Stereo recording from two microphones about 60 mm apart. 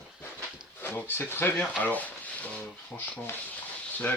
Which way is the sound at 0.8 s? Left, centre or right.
Left.